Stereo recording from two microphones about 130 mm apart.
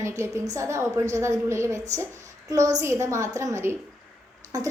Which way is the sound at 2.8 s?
20° right (ahead or behind).